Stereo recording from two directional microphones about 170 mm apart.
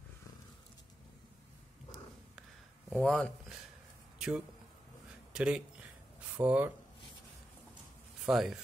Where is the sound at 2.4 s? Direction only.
5° left (ahead or behind).